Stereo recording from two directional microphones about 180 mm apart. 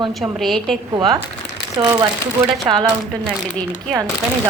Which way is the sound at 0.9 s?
30° right (ahead or behind).